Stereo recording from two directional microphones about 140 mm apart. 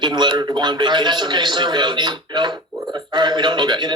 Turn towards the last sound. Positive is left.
turn(degrees=-30)  # may be behind; listen again after turning